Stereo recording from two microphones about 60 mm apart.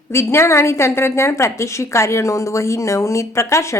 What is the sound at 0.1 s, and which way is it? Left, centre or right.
A woman's voice, left.